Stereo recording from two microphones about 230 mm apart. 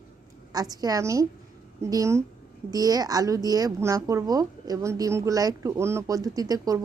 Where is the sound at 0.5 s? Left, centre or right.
Centre.